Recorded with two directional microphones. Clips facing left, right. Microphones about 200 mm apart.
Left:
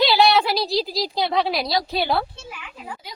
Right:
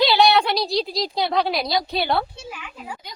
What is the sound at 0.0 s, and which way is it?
A woman's voice, centre (ahead or behind).